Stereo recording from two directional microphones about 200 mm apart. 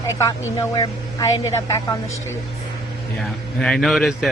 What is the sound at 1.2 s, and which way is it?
Speech, 15° left (ahead or behind).